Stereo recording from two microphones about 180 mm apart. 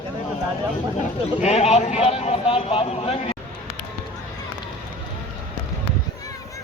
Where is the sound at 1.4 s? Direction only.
35° left (ahead or behind).